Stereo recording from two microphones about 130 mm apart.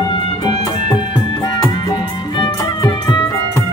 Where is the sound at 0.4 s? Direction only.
35° left (ahead or behind).